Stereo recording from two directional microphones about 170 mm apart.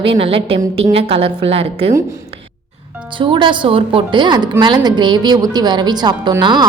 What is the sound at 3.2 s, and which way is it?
Speech, 30° right (ahead or behind).